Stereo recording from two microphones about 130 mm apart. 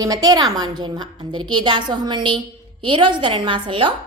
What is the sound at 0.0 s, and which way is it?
A woman's voice, 30° right (ahead or behind).